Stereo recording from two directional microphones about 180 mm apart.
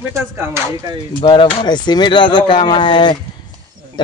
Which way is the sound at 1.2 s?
30° left (ahead or behind).